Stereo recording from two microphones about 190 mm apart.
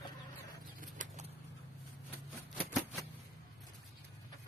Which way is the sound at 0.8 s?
40° right (ahead or behind).